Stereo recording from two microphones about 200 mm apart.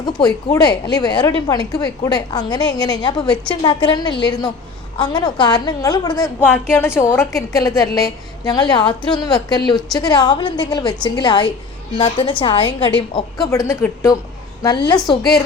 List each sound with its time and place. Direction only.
0.5 s a woman's voice: 20° left (ahead or behind)
6.2 s a woman's voice: 10° left (ahead or behind); by 15.2 s 25° left (ahead or behind)